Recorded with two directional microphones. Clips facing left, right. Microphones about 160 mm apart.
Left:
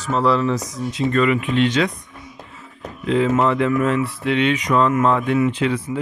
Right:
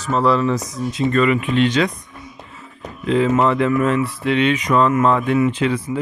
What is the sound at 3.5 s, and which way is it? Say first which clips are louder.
Speech: right 1 dB; 35° right (ahead or behind).